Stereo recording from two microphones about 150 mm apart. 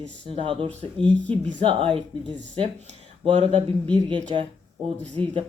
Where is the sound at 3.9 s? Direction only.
10° left (ahead or behind).